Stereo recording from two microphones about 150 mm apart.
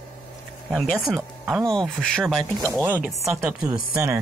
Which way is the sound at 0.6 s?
Centre (ahead or behind).